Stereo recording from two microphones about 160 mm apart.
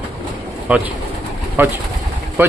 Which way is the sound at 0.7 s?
10° right (ahead or behind).